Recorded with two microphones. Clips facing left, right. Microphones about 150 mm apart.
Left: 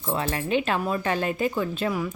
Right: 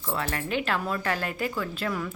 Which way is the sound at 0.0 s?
20° left (ahead or behind).